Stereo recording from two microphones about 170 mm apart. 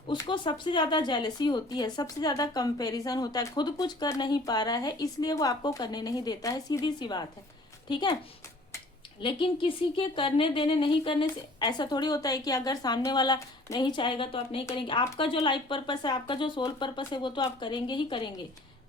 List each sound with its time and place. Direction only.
0.1 s speech: 30° left (ahead or behind)
9.2 s a woman's voice: 30° left (ahead or behind)